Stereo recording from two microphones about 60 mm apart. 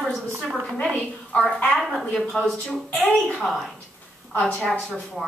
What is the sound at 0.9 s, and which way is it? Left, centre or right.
Speech, centre.